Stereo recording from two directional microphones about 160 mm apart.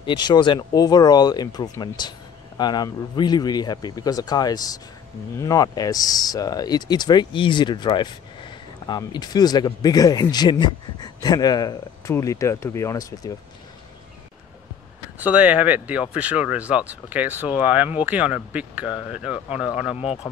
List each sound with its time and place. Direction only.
0.0 s speech: 30° left (ahead or behind)
15.1 s speech: 10° right (ahead or behind)